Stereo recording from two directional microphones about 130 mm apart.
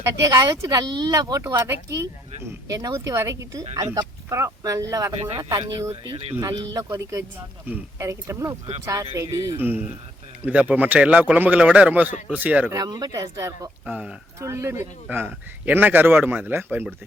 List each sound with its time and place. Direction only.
0.2 s speech: 30° right (ahead or behind)
5.5 s speech: 35° right (ahead or behind)
9.6 s a man's voice: 15° right (ahead or behind)
12.7 s speech: 30° right (ahead or behind)
13.8 s a man's voice: 10° right (ahead or behind)
14.3 s a man's voice: 20° right (ahead or behind)